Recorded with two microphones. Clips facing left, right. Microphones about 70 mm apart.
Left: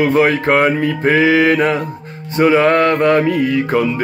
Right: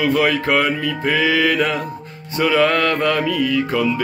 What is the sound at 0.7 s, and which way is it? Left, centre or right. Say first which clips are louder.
Music: left 6 dB; left.